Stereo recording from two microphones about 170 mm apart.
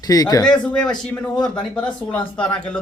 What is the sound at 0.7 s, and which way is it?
Speech, 5° left (ahead or behind).